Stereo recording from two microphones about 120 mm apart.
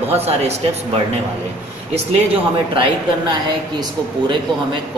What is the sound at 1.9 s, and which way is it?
Speech, 50° right (ahead or behind).